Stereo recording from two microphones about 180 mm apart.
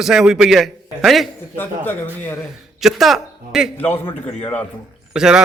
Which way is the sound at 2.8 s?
Centre (ahead or behind).